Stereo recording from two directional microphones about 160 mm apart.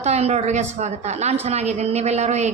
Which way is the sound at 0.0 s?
45° right (ahead or behind).